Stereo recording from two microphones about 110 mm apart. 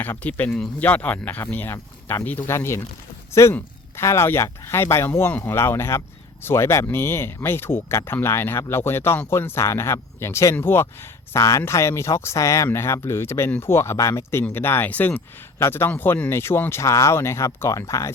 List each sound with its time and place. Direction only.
0.0 s speech: 15° left (ahead or behind)